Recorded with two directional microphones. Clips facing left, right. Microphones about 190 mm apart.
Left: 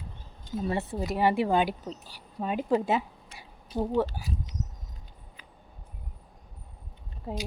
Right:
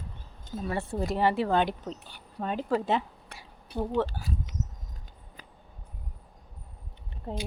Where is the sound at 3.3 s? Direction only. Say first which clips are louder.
Right 2 dB; 60° right (ahead or behind).